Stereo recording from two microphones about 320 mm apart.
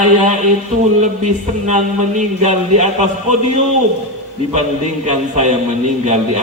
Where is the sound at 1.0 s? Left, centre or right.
Right.